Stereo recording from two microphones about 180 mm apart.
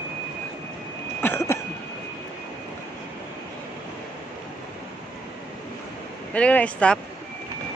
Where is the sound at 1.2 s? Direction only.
15° left (ahead or behind).